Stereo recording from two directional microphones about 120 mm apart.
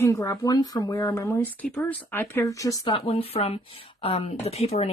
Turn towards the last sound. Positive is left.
turn(degrees=60)  # may be behind; listen again after turning